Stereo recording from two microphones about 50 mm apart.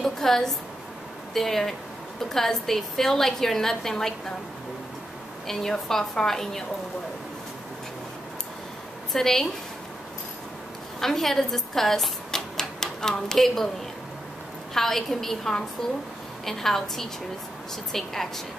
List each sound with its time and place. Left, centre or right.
0.0 s a woman's voice: centre
5.5 s a woman's voice: centre
9.1 s a woman's voice: centre
11.0 s speech: centre
14.7 s a woman's voice: centre